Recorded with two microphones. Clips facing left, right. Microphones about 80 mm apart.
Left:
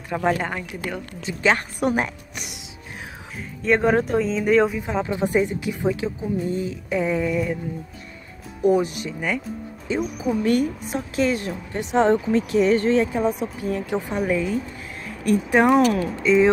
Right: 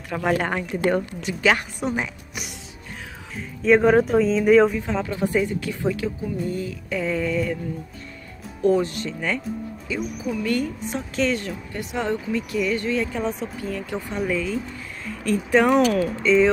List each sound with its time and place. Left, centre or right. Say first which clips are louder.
0.1 s a woman's voice: left 3 dB; centre
0.7 s speech: right 8 dB; right
1.2 s a woman's voice: left 2 dB; left
1.8 s speech: left 4 dB; left
3.3 s speech: right 3 dB; centre
4.7 s a woman's voice: left 1 dB; centre
8.6 s a woman's voice: left 1 dB; centre
9.9 s a woman's voice: left 4 dB; left
10.5 s a woman's voice: left 3 dB; centre
11.7 s speech: left 8 dB; left
13.0 s a woman's voice: left 4 dB; centre